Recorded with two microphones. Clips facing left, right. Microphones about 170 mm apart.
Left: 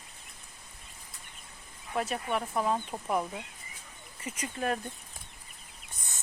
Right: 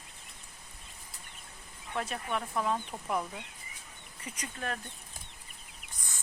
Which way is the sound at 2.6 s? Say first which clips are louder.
Left 2 dB; 20° left (ahead or behind).